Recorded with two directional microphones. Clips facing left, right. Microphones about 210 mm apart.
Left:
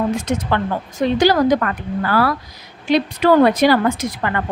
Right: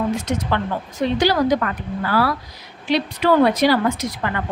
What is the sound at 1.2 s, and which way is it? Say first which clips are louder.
Speech: left 3 dB; 50° left (ahead or behind).